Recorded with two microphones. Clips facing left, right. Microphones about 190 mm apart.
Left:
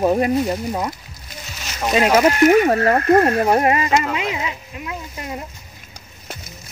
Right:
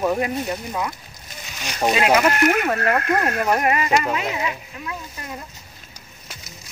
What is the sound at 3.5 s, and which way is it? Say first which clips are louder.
Speech: left 3 dB; 30° left (ahead or behind).